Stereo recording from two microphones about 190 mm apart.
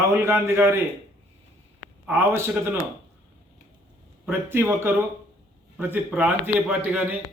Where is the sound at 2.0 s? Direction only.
10° right (ahead or behind).